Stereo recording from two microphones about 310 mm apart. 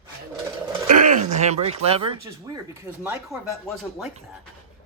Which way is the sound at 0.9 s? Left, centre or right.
Right.